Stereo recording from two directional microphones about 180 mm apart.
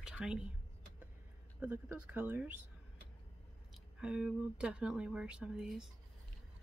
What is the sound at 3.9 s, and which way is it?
Speech, 5° right (ahead or behind).